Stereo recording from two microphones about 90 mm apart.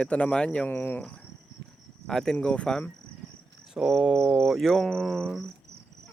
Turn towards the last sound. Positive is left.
turn(degrees=5)  # may be behind; listen again after turning